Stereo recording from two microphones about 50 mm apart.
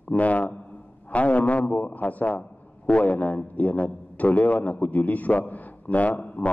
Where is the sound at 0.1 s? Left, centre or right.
Left.